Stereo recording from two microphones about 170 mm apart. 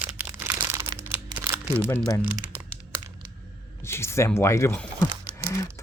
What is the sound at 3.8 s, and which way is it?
Speech, 15° left (ahead or behind).